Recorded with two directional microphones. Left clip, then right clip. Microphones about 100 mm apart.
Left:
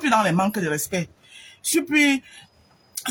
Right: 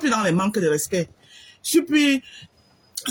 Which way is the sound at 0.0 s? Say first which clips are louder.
Left 2 dB; 20° left (ahead or behind).